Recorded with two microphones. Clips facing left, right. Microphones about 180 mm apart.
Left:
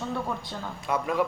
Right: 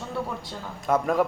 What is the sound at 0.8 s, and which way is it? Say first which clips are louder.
Speech: right 5 dB; 45° right (ahead or behind).